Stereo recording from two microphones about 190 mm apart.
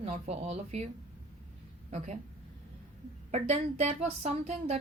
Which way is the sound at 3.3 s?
35° right (ahead or behind).